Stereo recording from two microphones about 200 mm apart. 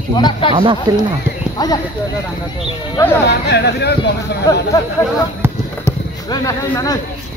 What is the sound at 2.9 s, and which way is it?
Speech, 10° left (ahead or behind).